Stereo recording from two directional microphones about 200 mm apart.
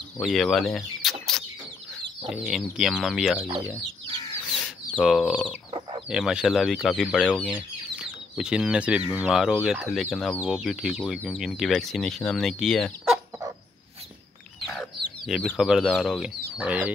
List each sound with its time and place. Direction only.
0.2 s speech: centre (ahead or behind)
1.3 s chicken: 5° left (ahead or behind)
2.2 s speech: centre (ahead or behind)
4.9 s speech: centre (ahead or behind)
5.7 s chicken: 25° right (ahead or behind)
6.0 s speech: 5° right (ahead or behind)
14.7 s speech: centre (ahead or behind)